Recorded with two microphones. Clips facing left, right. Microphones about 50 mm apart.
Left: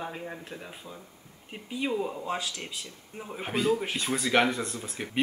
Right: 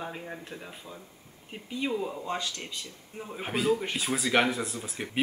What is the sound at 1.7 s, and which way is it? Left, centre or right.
Speech, centre.